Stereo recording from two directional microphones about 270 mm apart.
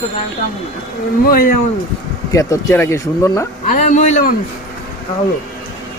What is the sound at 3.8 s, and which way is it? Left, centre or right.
Speech, left.